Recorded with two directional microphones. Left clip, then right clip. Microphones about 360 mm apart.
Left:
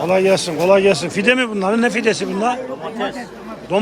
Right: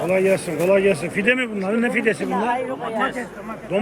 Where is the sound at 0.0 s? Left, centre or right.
Centre.